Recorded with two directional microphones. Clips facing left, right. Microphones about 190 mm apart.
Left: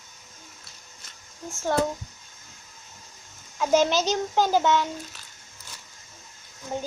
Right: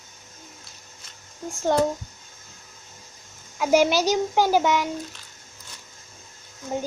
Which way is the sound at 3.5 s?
10° right (ahead or behind).